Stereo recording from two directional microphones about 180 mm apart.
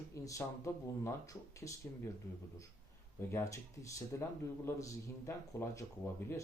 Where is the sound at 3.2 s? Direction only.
15° left (ahead or behind).